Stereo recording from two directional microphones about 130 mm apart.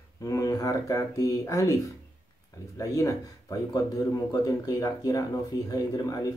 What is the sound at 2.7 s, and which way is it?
Speech, 25° left (ahead or behind).